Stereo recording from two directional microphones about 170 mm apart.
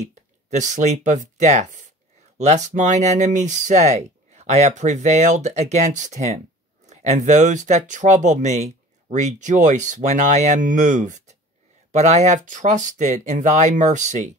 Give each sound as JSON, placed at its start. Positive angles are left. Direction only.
{"t": 0.0, "sound": "speech", "side_deg": -45}